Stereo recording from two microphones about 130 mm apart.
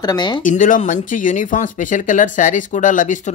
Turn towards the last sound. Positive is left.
turn(degrees=85)